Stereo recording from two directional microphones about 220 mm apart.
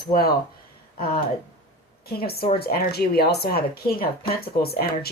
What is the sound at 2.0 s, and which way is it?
Speech, 45° left (ahead or behind).